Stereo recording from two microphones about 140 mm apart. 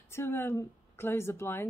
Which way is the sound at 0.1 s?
15° left (ahead or behind).